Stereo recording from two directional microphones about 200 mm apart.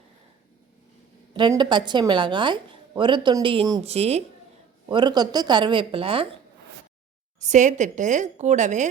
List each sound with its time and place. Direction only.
1.3 s speech: 25° right (ahead or behind)
4.9 s speech: 20° right (ahead or behind)
7.3 s a woman's voice: 35° right (ahead or behind)